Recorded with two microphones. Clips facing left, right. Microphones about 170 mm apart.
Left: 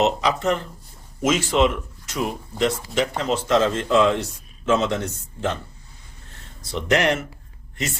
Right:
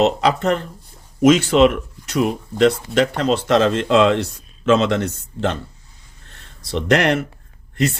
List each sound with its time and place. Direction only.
0.0 s speech: 60° right (ahead or behind)
6.7 s speech: 65° right (ahead or behind)